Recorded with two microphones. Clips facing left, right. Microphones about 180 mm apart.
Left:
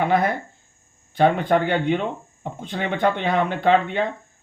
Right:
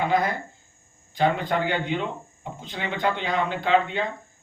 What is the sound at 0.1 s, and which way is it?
Speech, 55° left (ahead or behind).